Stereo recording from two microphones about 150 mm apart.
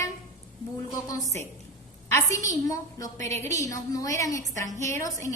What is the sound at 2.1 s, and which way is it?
A woman's voice, 20° left (ahead or behind).